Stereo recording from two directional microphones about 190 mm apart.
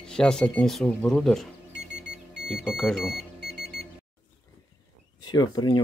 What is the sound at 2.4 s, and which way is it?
Speech, centre (ahead or behind).